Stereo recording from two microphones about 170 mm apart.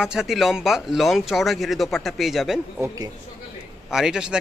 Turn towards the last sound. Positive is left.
turn(degrees=-5)  # may be behind; listen again after turning